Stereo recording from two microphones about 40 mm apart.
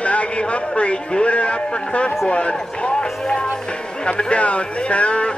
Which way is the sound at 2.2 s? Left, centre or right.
Left.